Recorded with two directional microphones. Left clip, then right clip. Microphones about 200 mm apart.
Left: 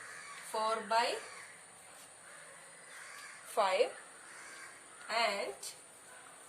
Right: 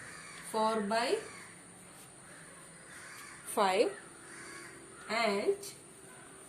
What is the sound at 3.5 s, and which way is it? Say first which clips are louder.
Speech: right 2 dB; 35° right (ahead or behind).